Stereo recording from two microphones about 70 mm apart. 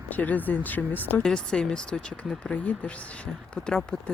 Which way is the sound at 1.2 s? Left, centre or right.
Centre.